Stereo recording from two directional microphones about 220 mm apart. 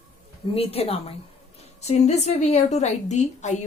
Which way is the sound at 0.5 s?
25° left (ahead or behind).